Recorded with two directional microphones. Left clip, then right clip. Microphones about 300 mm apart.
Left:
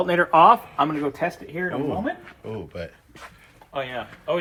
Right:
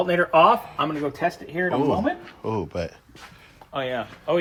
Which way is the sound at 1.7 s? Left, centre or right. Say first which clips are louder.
Right 6 dB; centre.